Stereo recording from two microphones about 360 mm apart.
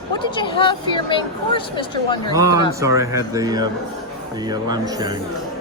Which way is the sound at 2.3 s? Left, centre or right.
Centre.